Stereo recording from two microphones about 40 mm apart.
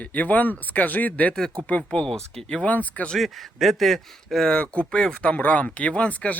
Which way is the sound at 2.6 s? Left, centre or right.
Left.